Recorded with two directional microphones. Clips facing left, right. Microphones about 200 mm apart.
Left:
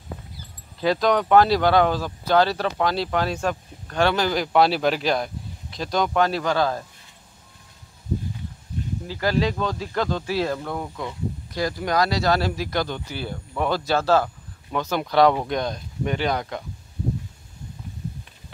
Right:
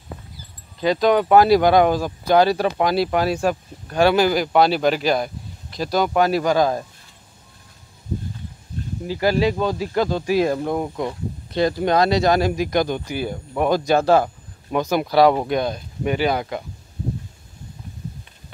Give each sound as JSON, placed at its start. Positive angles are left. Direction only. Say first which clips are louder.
{"t": 0.7, "sound": "speech", "louder": "right 3 dB", "side_deg": 0}
{"t": 9.0, "sound": "speech", "louder": "right 4 dB", "side_deg": -15}